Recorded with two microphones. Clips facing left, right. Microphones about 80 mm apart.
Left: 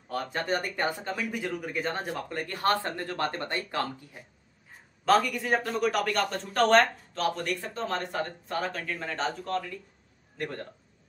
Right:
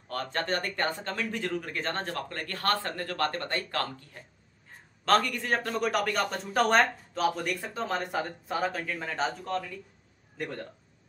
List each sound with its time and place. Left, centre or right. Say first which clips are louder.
0.1 s speech: left 1 dB; centre